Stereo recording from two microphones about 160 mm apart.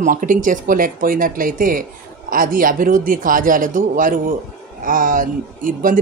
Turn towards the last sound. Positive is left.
turn(degrees=-60)  # may be behind; listen again after turning